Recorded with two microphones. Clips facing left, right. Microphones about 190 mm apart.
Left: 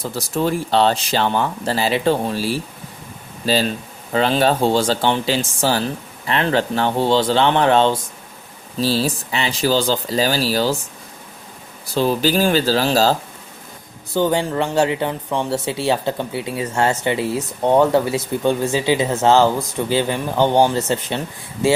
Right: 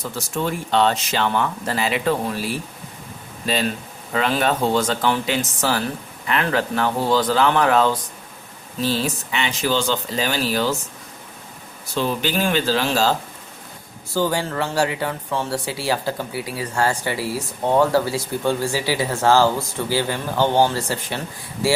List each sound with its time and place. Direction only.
0.0 s speech: 35° left (ahead or behind)
11.9 s speech: 35° left (ahead or behind)
14.1 s speech: 20° left (ahead or behind)